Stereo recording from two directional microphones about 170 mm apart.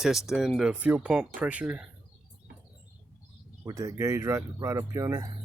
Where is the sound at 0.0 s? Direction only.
Centre (ahead or behind).